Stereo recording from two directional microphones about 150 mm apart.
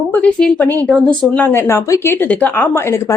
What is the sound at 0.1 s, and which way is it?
A woman's voice, 10° left (ahead or behind).